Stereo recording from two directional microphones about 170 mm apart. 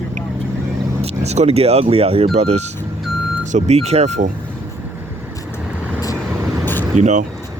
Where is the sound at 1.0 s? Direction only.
40° right (ahead or behind).